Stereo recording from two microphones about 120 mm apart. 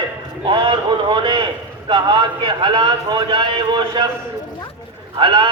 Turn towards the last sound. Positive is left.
turn(degrees=-45)  # may be behind; listen again after turning